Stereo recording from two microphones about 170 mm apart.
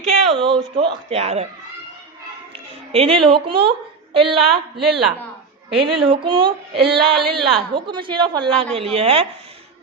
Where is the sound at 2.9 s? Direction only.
35° right (ahead or behind).